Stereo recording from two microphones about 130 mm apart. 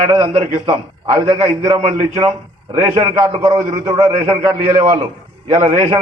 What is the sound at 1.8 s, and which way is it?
A man's voice, 55° right (ahead or behind).